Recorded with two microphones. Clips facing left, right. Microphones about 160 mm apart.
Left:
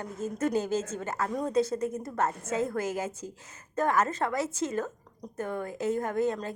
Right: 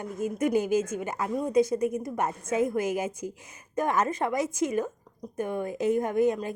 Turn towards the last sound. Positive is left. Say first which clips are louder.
# right 4 dB
turn(degrees=-15)  # may be behind; listen again after turning